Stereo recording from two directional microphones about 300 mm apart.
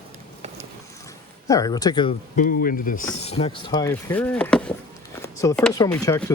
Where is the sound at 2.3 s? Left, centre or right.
Left.